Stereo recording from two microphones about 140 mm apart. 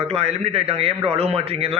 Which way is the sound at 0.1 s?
45° right (ahead or behind).